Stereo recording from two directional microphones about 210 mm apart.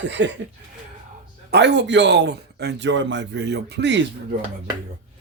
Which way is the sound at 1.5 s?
55° right (ahead or behind).